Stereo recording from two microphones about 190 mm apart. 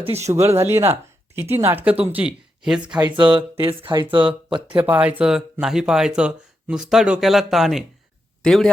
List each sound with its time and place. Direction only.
0.0 s speech: 35° right (ahead or behind)
0.7 s speech: 10° right (ahead or behind)
3.2 s speech: 25° right (ahead or behind)
4.8 s a man's voice: 5° right (ahead or behind)